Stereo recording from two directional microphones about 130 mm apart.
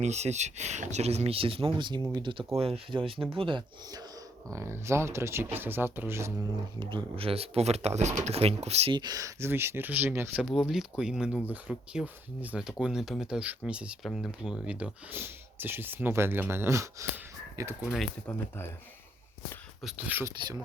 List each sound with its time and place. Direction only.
0.0 s speech: 60° right (ahead or behind); by 2.0 s 35° right (ahead or behind)
2.6 s speech: 45° right (ahead or behind)
4.5 s speech: 20° right (ahead or behind)
6.7 s speech: 45° right (ahead or behind)
8.9 s speech: 35° right (ahead or behind); by 10.4 s 15° right (ahead or behind)
10.5 s speech: 5° right (ahead or behind); by 17.7 s 25° right (ahead or behind)
18.3 s speech: 15° left (ahead or behind)
19.8 s speech: 15° right (ahead or behind)